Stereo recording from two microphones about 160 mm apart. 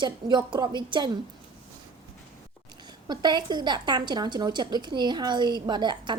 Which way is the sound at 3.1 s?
25° right (ahead or behind).